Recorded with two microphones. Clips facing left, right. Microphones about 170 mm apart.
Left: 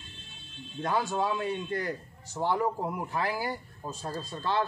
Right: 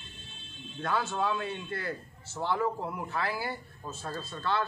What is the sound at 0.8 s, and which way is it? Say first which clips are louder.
Speech: left 2 dB; 15° left (ahead or behind).